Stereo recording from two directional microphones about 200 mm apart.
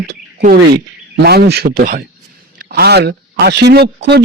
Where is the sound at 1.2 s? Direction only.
55° right (ahead or behind).